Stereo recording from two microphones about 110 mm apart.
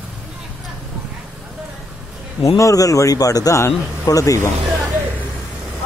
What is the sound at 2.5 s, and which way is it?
A man's voice, 30° left (ahead or behind).